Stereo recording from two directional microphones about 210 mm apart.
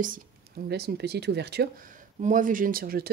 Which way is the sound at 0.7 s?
50° right (ahead or behind).